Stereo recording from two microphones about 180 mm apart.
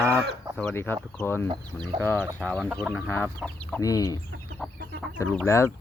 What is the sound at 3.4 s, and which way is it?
Speech, 10° left (ahead or behind).